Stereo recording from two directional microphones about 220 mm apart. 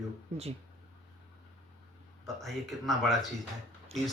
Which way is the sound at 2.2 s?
Centre (ahead or behind).